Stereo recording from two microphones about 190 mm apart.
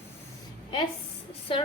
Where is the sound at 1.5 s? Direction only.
30° left (ahead or behind).